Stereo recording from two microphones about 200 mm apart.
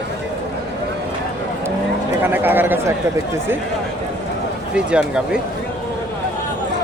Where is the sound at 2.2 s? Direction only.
10° right (ahead or behind).